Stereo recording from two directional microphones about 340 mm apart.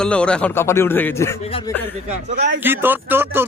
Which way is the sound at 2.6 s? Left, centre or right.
Centre.